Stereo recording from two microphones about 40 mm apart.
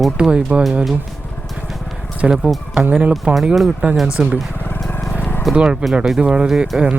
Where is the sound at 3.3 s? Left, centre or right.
Right.